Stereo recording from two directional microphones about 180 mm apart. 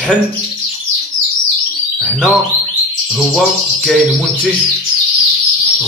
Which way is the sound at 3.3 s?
Centre (ahead or behind).